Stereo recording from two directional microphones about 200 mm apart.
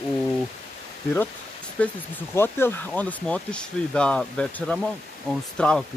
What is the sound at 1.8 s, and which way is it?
Speech, 5° left (ahead or behind).